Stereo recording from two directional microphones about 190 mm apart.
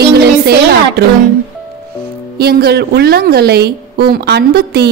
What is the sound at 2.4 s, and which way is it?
A woman's voice, 55° right (ahead or behind).